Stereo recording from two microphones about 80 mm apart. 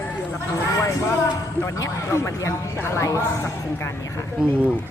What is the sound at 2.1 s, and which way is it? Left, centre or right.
Speech, left.